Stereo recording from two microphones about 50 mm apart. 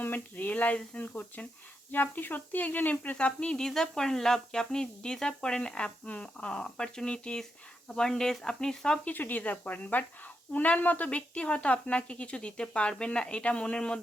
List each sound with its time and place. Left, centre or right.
0.0 s speech: left
3.2 s a woman's voice: left
9.0 s a woman's voice: left; by 14.0 s centre